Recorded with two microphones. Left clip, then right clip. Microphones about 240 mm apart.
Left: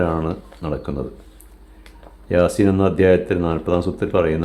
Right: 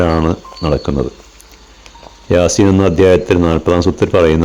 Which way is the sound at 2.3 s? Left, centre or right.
Right.